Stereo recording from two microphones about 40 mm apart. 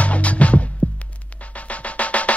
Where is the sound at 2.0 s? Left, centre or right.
Left.